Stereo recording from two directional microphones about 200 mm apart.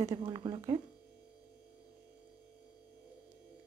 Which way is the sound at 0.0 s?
25° right (ahead or behind).